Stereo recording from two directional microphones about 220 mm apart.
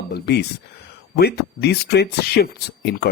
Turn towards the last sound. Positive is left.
turn(degrees=45)  # may be behind; listen again after turning